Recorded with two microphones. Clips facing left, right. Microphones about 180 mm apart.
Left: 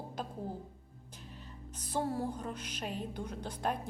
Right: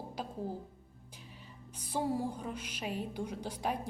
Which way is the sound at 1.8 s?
10° right (ahead or behind).